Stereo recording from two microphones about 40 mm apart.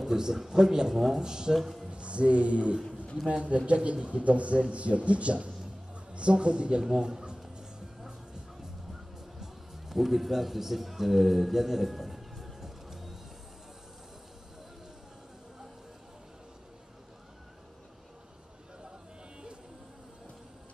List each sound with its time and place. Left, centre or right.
0.0 s speech: centre
1.6 s speech: centre
1.9 s a man's voice: right
6.8 s a sound: centre
9.4 s music: centre